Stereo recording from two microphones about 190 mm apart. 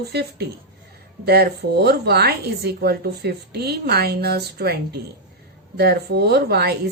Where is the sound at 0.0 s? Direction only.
60° right (ahead or behind).